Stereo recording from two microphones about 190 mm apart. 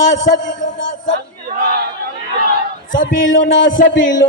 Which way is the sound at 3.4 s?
80° left.